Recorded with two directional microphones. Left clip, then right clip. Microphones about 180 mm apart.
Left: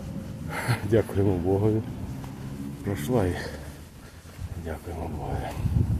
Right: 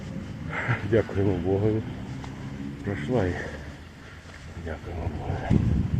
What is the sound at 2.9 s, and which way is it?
Speech, 25° left (ahead or behind).